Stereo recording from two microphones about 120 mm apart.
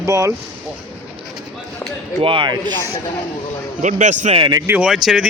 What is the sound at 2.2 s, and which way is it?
Speech, 45° right (ahead or behind).